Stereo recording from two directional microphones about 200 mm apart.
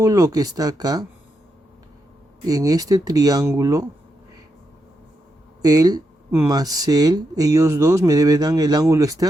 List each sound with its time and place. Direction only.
0.0 s speech: 15° right (ahead or behind)
2.5 s speech: 20° right (ahead or behind)
5.6 s speech: 20° right (ahead or behind)